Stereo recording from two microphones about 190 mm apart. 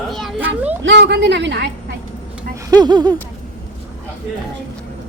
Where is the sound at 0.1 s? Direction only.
Centre (ahead or behind).